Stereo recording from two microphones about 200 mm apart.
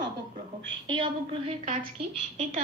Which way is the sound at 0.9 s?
25° right (ahead or behind).